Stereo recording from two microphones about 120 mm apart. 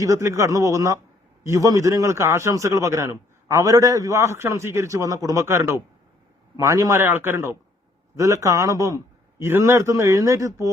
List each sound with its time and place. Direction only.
0.0 s a man's voice: 25° right (ahead or behind)
7.0 s a man's voice: 20° right (ahead or behind)